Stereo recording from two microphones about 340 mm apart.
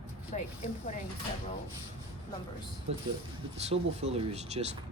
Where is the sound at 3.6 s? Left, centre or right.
Centre.